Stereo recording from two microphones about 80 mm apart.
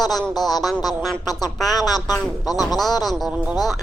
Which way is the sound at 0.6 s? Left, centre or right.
Centre.